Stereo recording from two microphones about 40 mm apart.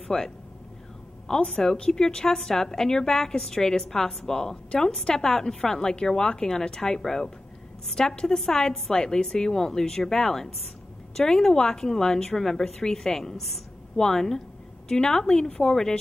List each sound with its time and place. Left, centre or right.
0.1 s a woman's voice: centre